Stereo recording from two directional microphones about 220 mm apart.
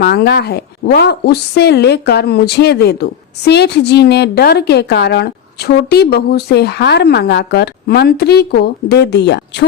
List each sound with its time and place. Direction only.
0.0 s a woman's voice: 45° left (ahead or behind)